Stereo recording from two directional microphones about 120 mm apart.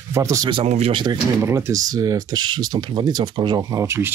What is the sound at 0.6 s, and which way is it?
Speech, 65° right (ahead or behind).